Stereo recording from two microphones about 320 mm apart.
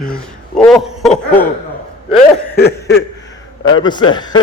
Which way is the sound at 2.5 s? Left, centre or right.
Left.